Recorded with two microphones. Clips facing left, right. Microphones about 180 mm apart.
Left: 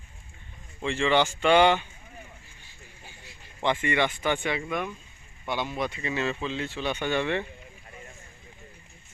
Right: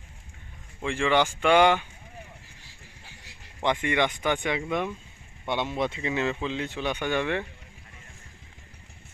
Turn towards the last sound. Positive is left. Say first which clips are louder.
# even
turn(degrees=-10)  # may be behind; listen again after turning